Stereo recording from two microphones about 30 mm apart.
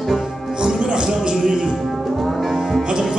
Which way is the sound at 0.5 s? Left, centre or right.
Right.